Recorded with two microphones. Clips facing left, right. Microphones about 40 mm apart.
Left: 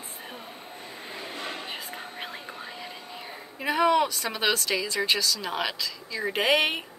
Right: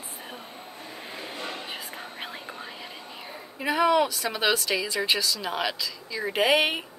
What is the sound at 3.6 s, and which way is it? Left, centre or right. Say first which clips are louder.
A woman's voice: even; centre.